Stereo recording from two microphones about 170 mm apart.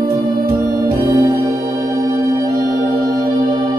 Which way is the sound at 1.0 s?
20° right (ahead or behind).